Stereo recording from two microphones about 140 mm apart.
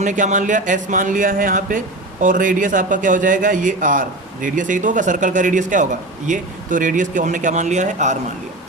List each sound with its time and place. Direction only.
0.0 s a man's voice: 60° right (ahead or behind)